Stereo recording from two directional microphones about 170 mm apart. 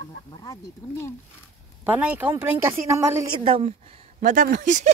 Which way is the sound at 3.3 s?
35° right (ahead or behind).